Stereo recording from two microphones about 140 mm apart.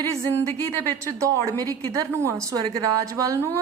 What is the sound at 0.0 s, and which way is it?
A woman's voice, 20° right (ahead or behind).